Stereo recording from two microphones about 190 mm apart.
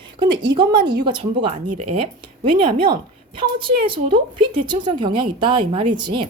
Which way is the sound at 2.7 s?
25° right (ahead or behind).